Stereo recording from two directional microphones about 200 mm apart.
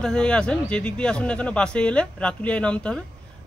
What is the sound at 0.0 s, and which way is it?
Speech, 5° left (ahead or behind).